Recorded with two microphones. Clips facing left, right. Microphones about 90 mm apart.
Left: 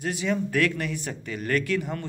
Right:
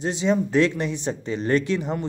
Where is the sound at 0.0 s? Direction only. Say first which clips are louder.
Right 5 dB; 25° right (ahead or behind).